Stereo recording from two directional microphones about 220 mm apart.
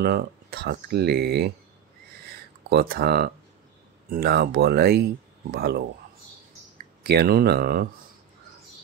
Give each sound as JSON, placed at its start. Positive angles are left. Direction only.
{"t": 0.0, "sound": "speech", "side_deg": -45}
{"t": 2.7, "sound": "speech", "side_deg": -45}
{"t": 7.0, "sound": "speech", "side_deg": -45}